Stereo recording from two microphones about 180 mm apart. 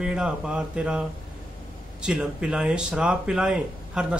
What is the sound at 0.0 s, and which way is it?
Speech, 5° right (ahead or behind).